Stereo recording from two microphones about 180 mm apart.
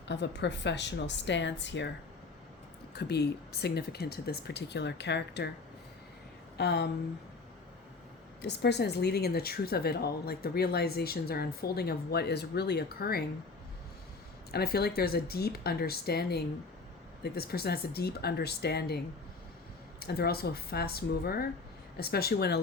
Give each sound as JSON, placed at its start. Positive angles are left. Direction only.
{"t": 0.1, "sound": "a woman's voice", "side_deg": 75}
{"t": 2.9, "sound": "speech", "side_deg": 65}
{"t": 6.6, "sound": "a woman's voice", "side_deg": 65}
{"t": 8.4, "sound": "speech", "side_deg": 65}
{"t": 14.5, "sound": "speech", "side_deg": 60}
{"t": 20.0, "sound": "speech", "side_deg": 60}